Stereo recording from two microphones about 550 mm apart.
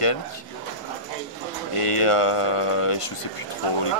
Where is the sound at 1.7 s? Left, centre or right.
Left.